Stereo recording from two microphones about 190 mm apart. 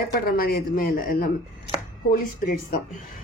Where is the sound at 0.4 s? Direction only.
50° left (ahead or behind).